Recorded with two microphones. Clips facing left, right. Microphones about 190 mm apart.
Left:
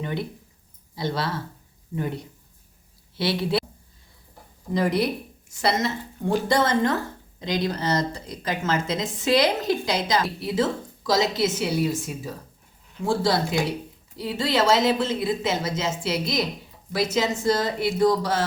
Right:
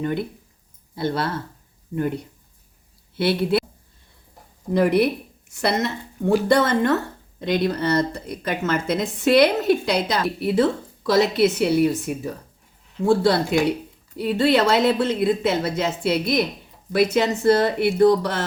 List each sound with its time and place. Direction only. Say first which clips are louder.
0.9 s speech: right 3 dB; 55° right (ahead or behind)
3.2 s speech: right 4 dB; 55° right (ahead or behind)
4.7 s a woman's voice: right 5 dB; 60° right (ahead or behind)